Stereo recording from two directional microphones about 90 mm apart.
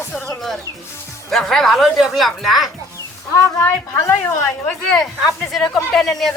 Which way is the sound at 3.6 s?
30° left (ahead or behind).